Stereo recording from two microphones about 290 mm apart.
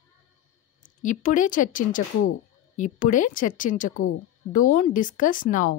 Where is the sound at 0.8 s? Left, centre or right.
Left.